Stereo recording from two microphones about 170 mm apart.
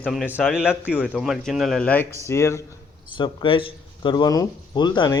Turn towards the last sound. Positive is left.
turn(degrees=25)  # may be behind; listen again after turning